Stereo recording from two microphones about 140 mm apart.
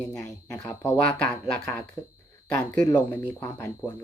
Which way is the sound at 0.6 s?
10° left (ahead or behind).